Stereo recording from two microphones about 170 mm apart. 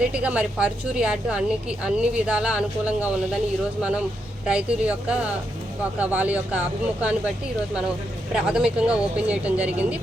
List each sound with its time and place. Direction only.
0.0 s a woman's voice: 5° right (ahead or behind)
8.3 s a woman's voice: 5° right (ahead or behind)